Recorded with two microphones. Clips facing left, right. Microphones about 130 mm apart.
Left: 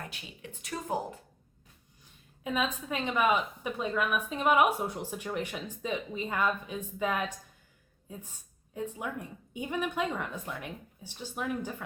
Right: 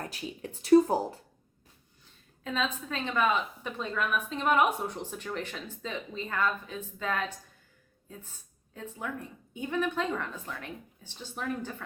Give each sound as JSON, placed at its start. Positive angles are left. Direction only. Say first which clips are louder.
{"t": 0.0, "sound": "speech", "louder": "right 6 dB", "side_deg": -35}
{"t": 2.0, "sound": "a woman's voice", "louder": "left 2 dB", "side_deg": 15}